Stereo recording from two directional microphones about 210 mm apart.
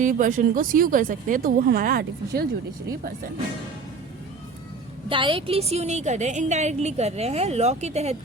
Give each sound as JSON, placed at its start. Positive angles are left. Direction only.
{"t": 0.0, "sound": "a woman's voice", "side_deg": -40}
{"t": 5.0, "sound": "a woman's voice", "side_deg": -25}